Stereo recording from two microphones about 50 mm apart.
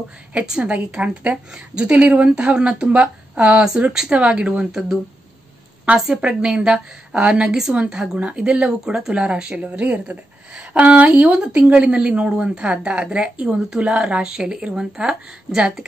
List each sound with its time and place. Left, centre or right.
0.3 s a woman's voice: centre
5.9 s a woman's voice: right
7.4 s a woman's voice: centre
9.6 s a woman's voice: right
12.1 s speech: centre